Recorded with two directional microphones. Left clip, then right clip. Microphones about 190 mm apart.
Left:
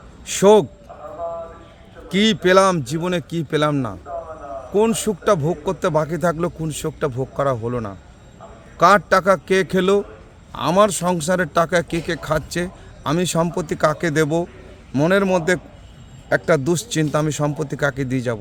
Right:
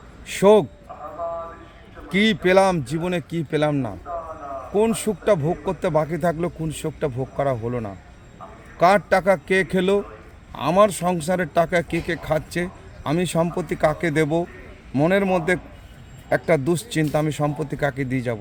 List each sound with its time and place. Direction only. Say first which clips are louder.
0.4 s speech: left 2 dB; 15° left (ahead or behind)
2.1 s speech: left 2 dB; 15° left (ahead or behind)